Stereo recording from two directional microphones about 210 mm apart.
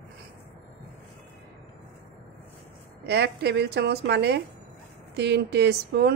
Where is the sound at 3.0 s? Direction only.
50° right (ahead or behind).